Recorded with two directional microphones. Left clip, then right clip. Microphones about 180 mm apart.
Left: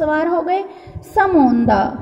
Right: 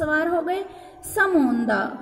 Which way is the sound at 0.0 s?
20° left (ahead or behind).